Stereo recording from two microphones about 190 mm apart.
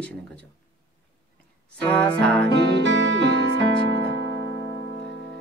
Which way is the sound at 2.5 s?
70° right (ahead or behind).